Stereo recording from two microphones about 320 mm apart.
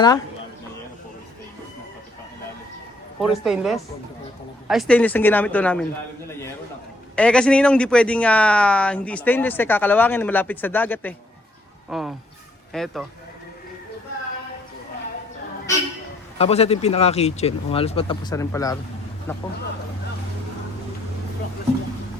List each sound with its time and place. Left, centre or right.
3.2 s a man's voice: centre
7.2 s a man's voice: centre
16.4 s speech: centre